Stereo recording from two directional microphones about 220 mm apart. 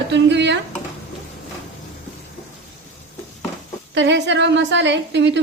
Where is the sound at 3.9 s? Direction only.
55° right (ahead or behind).